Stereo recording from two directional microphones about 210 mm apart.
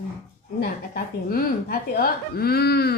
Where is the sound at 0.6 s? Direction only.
45° left (ahead or behind).